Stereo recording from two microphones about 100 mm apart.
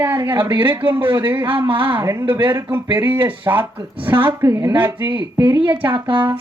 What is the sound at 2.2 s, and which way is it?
Speech, 50° right (ahead or behind).